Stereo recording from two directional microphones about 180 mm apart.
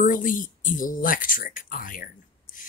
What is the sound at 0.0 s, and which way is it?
Speech, 50° left (ahead or behind).